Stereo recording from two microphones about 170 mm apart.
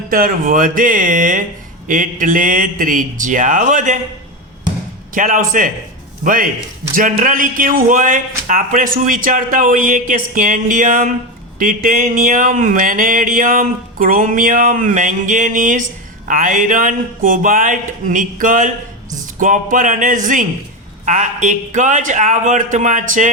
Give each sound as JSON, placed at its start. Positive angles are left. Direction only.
{"t": 0.1, "sound": "speech", "side_deg": -55}
{"t": 5.1, "sound": "speech", "side_deg": -50}